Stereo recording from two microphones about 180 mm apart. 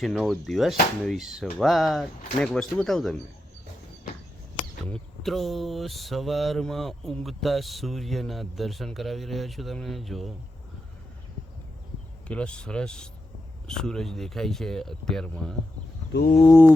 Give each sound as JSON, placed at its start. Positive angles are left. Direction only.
{"t": 0.0, "sound": "speech", "side_deg": 0}
{"t": 4.9, "sound": "speech", "side_deg": 0}
{"t": 12.3, "sound": "speech", "side_deg": 5}
{"t": 16.1, "sound": "a sound", "side_deg": 70}
{"t": 16.5, "sound": "music", "side_deg": 10}